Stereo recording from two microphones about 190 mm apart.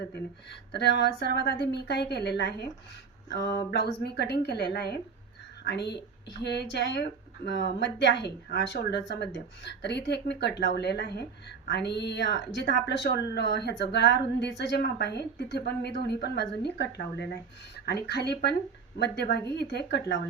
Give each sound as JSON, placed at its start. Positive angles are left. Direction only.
{"t": 0.7, "sound": "speech", "side_deg": 60}